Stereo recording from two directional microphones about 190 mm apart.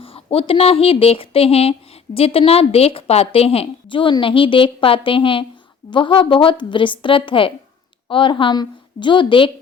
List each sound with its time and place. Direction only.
0.0 s a woman's voice: 30° left (ahead or behind)